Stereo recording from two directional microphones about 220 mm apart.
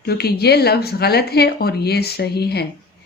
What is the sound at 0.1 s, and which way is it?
A woman's voice, 45° left (ahead or behind).